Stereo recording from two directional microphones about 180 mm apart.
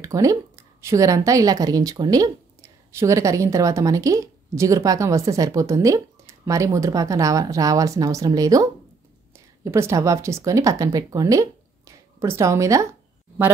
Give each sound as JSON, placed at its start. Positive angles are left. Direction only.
{"t": 0.0, "sound": "a woman's voice", "side_deg": -20}
{"t": 9.7, "sound": "speech", "side_deg": -15}